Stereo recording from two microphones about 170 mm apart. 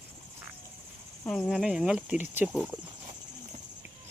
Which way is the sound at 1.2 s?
Centre (ahead or behind).